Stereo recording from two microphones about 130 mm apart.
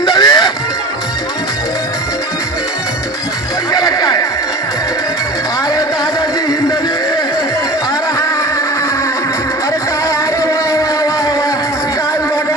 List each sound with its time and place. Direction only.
0.0 s honk: 30° left (ahead or behind)
3.7 s music: 30° left (ahead or behind)
10.4 s music: 25° left (ahead or behind)